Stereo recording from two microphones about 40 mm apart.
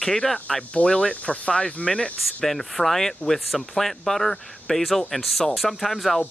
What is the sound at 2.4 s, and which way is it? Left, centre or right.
Speech, centre.